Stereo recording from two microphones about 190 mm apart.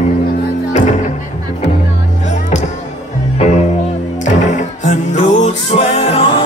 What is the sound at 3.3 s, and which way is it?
Music, 35° left (ahead or behind).